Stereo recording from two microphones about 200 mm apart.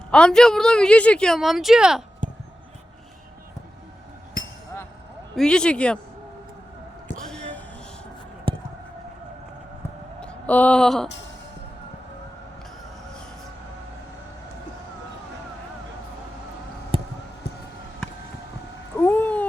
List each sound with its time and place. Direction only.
0.1 s speech: 5° left (ahead or behind)
5.4 s speech: 5° left (ahead or behind)
7.3 s a sound: 5° left (ahead or behind)
8.5 s siren: 25° right (ahead or behind)
10.2 s speech: 5° left (ahead or behind)
16.9 s police car: 25° right (ahead or behind)
18.9 s cat: 10° left (ahead or behind)